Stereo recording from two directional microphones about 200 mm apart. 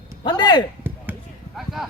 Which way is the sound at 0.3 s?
20° left (ahead or behind).